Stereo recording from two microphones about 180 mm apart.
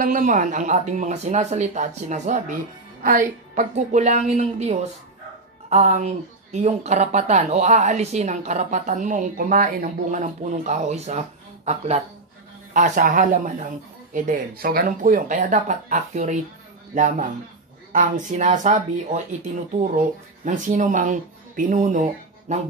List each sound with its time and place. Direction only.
0.0 s speech: 45° right (ahead or behind)